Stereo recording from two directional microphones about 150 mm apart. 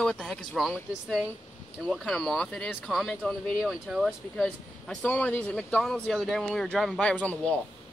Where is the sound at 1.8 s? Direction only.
5° left (ahead or behind).